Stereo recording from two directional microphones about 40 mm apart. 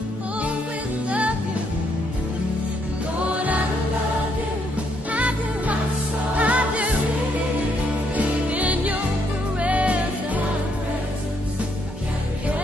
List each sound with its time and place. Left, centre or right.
5.1 s music: right
8.2 s music: right